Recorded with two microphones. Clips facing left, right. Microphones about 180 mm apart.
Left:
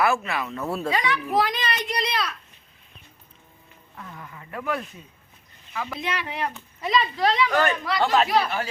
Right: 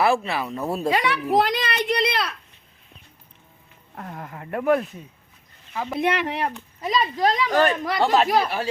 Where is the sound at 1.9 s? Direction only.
60° right (ahead or behind).